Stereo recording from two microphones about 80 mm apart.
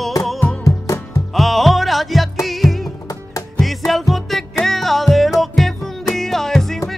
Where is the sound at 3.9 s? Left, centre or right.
Centre.